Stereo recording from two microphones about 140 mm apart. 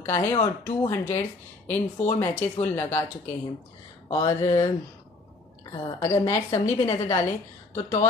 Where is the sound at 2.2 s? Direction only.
15° left (ahead or behind).